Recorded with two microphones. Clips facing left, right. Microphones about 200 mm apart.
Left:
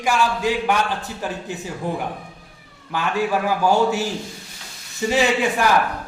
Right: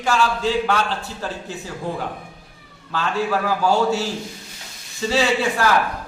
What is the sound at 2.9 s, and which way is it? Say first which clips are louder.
A man's voice: left 1 dB; 15° left (ahead or behind).